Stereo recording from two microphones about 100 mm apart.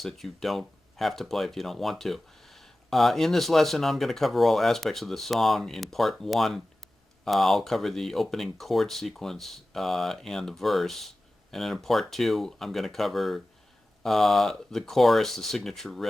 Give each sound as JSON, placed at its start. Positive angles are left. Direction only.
{"t": 0.0, "sound": "speech", "side_deg": 0}